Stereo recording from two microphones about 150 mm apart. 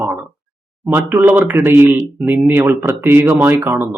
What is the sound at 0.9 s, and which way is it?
Speech, 10° right (ahead or behind).